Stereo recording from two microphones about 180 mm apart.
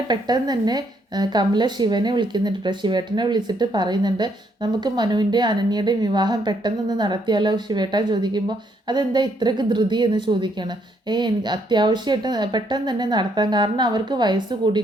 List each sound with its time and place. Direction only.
0.1 s a woman's voice: 20° right (ahead or behind)